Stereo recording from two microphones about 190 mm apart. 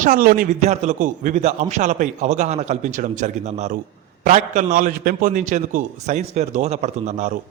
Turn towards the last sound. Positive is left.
turn(degrees=-40)  # may be behind; listen again after turning